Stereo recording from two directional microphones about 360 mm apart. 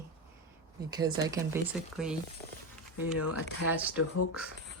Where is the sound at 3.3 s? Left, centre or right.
Left.